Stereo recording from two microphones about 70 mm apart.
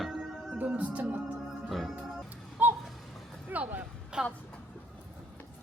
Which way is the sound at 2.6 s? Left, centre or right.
Right.